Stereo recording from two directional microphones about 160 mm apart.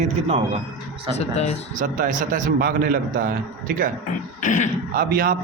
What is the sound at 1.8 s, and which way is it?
A man's voice, 55° right (ahead or behind).